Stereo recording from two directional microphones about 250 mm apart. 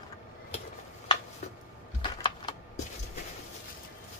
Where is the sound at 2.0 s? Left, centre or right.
Centre.